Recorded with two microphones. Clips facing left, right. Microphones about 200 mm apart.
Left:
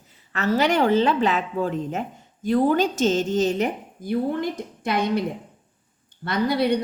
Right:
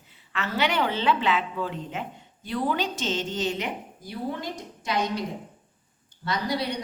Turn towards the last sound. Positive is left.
turn(degrees=55)  # may be behind; listen again after turning